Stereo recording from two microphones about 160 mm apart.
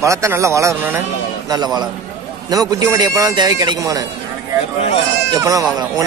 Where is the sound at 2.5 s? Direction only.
25° right (ahead or behind).